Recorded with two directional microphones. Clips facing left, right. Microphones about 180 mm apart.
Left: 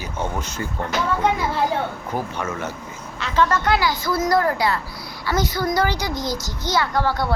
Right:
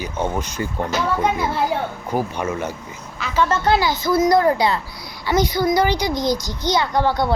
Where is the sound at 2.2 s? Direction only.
15° right (ahead or behind).